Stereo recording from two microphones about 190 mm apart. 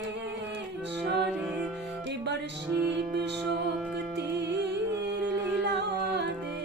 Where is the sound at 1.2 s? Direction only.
Centre (ahead or behind).